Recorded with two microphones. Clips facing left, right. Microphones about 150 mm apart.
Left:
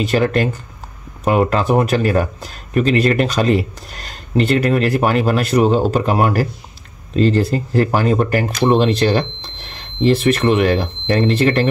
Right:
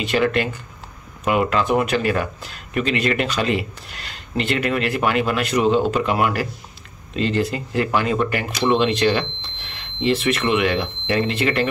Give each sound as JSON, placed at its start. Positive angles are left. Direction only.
{"t": 0.0, "sound": "speech", "side_deg": 40}